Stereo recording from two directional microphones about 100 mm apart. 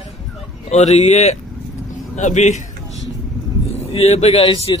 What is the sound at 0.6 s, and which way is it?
Speech, 90° left.